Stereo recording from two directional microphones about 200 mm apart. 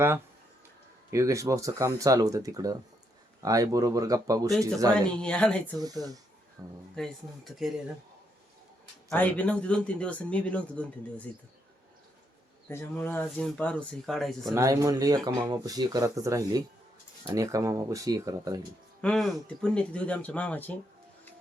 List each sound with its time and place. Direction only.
1.1 s speech: 15° right (ahead or behind)
5.2 s speech: 5° left (ahead or behind)
5.7 s speech: 20° right (ahead or behind)
6.9 s speech: centre (ahead or behind)
9.0 s speech: 10° left (ahead or behind)
12.6 s speech: 10° left (ahead or behind)
14.5 s speech: 15° right (ahead or behind)
19.0 s speech: 5° left (ahead or behind)